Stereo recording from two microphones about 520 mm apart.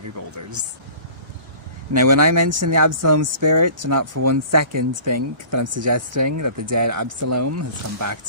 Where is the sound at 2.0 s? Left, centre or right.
Right.